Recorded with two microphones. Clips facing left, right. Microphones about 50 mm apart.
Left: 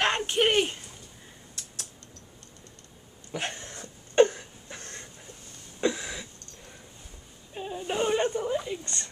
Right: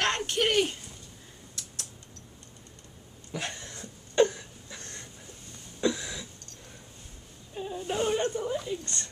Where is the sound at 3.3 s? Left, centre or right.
Left.